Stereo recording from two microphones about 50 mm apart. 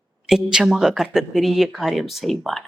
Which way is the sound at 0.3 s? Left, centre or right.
Centre.